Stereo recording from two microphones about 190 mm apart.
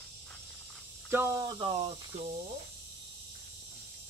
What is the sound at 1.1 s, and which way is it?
Speech, 15° right (ahead or behind).